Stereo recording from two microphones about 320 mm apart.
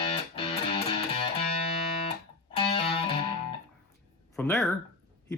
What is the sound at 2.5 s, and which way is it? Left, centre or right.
Music, centre.